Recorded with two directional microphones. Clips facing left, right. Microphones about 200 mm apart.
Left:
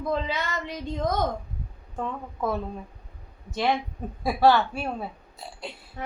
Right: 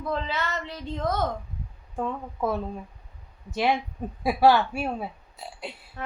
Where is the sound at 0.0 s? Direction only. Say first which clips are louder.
Left 1 dB; 15° left (ahead or behind).